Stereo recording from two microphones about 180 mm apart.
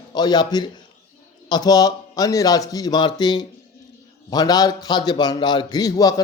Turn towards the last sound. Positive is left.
turn(degrees=20)  # may be behind; listen again after turning